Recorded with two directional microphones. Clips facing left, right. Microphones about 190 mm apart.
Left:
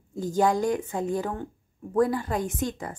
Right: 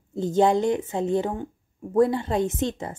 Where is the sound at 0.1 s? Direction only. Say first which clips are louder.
Right 4 dB; 25° right (ahead or behind).